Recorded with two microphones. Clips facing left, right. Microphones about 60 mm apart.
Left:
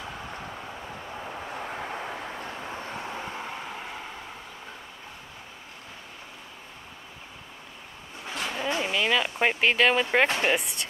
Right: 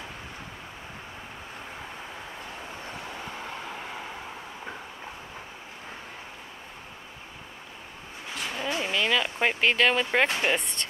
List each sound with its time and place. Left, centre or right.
3.1 s vehicle: left
3.3 s vehicle: centre
8.5 s a sound: centre
10.4 s speech: centre